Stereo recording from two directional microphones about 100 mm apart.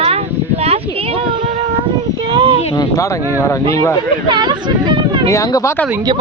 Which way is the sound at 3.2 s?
20° right (ahead or behind).